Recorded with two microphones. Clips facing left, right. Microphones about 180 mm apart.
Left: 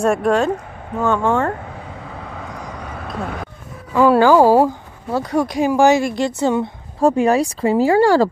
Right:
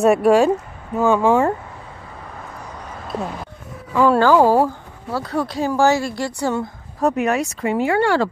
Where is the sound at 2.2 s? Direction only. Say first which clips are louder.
Left 2 dB; 85° left; by 3.1 s 70° left (ahead or behind).